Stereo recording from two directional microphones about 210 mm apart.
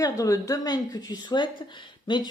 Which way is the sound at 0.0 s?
15° left (ahead or behind).